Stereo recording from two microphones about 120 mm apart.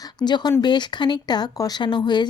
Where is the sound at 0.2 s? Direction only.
35° left (ahead or behind).